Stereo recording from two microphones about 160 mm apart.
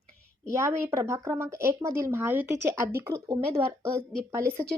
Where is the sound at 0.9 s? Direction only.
15° right (ahead or behind).